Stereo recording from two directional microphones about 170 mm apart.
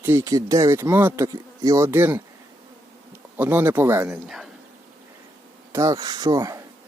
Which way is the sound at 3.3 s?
10° right (ahead or behind).